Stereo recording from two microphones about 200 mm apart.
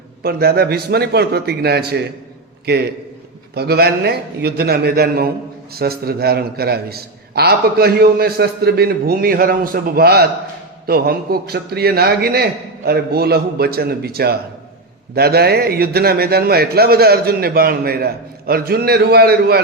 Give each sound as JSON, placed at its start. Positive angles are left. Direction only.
{"t": 0.2, "sound": "a man's voice", "side_deg": -50}
{"t": 3.5, "sound": "a man's voice", "side_deg": -50}